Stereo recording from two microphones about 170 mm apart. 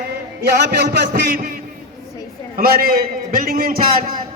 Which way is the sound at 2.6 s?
60° right (ahead or behind).